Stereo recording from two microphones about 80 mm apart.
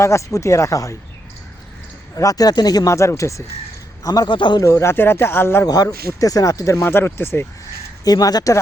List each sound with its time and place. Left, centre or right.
0.0 s speech: left
2.1 s speech: left
2.9 s speech: left
4.0 s a man's voice: left
4.3 s a man's voice: left
4.6 s speech: left
5.6 s speech: left
6.8 s speech: left
8.0 s speech: left